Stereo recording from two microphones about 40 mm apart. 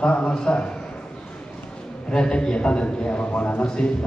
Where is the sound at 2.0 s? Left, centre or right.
Left.